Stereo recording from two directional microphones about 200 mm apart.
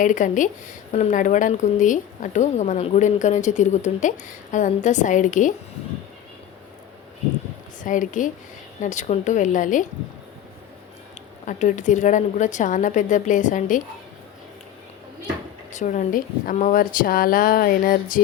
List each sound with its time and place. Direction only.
0.0 s a woman's voice: 40° left (ahead or behind)
7.8 s a woman's voice: 40° left (ahead or behind)
11.4 s a woman's voice: 40° left (ahead or behind)
15.7 s a woman's voice: 40° left (ahead or behind)